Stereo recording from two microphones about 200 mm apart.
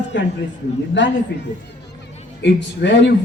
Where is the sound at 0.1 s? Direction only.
65° left (ahead or behind).